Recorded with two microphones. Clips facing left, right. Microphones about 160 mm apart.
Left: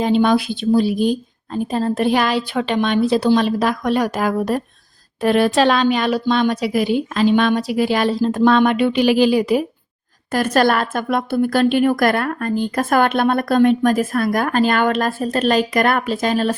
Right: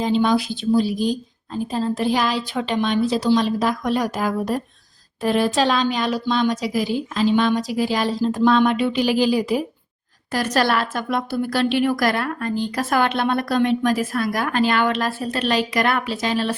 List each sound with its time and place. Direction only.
0.0 s a woman's voice: 60° left (ahead or behind)
10.3 s a woman's voice: 50° left (ahead or behind)